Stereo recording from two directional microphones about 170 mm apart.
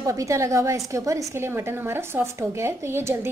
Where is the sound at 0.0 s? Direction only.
20° right (ahead or behind).